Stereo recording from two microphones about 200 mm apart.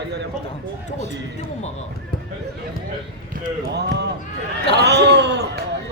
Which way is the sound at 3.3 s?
45° right (ahead or behind).